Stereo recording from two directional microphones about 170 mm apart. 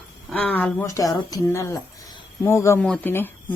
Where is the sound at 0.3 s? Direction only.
10° left (ahead or behind).